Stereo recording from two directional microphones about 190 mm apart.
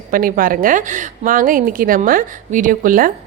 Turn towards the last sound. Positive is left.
turn(degrees=-45)  # may be behind; listen again after turning